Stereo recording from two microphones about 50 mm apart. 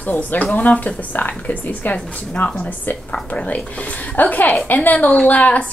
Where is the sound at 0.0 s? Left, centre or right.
Left.